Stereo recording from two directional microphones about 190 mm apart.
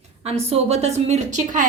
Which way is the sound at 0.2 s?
35° right (ahead or behind).